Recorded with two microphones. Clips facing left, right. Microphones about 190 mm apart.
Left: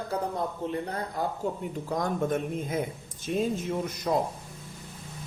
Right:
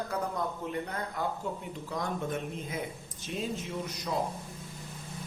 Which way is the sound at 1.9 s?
45° left (ahead or behind).